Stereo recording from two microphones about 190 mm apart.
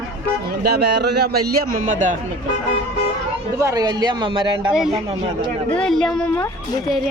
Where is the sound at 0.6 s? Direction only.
60° right (ahead or behind); by 2.2 s 40° right (ahead or behind).